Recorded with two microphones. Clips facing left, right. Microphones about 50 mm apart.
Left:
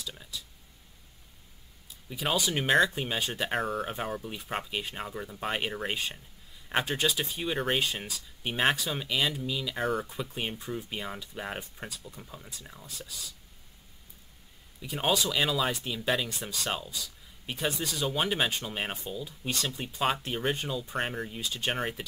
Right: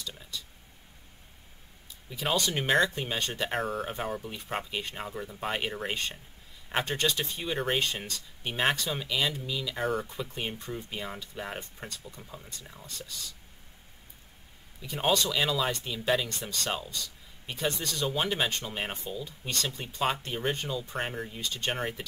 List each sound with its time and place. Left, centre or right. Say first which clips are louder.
0.0 s speech: right 1 dB; centre
2.0 s speech: even; centre
14.8 s speech: right 1 dB; centre